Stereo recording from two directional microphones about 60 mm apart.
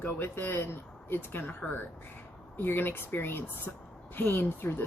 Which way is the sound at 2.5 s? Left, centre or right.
Left.